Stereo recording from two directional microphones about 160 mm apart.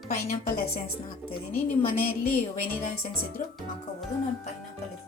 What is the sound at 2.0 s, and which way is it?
Speech, 65° left (ahead or behind).